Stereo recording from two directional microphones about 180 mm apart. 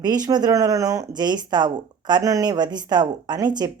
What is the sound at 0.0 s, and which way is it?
Speech, 20° right (ahead or behind).